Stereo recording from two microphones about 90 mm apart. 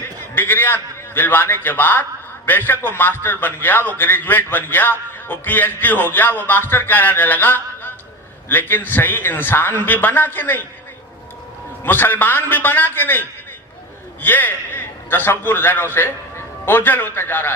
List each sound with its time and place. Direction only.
0.3 s a man's voice: 20° left (ahead or behind)
11.8 s a man's voice: 25° left (ahead or behind)